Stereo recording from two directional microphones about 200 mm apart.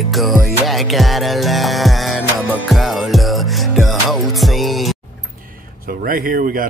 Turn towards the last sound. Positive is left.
turn(degrees=-45)  # may be behind; listen again after turning